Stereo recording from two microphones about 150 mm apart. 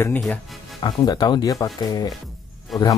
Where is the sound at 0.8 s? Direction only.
30° left (ahead or behind).